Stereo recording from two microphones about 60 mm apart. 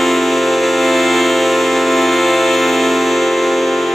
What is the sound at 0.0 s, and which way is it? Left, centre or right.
Music, centre.